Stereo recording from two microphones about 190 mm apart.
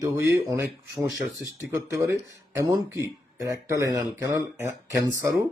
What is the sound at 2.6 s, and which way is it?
Speech, 15° right (ahead or behind).